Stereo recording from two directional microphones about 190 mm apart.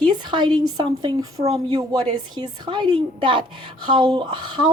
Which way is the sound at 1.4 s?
30° right (ahead or behind).